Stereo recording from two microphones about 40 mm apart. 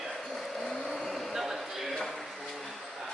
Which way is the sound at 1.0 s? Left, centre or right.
Centre.